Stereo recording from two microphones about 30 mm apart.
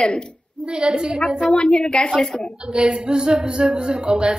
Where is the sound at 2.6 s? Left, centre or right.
Right.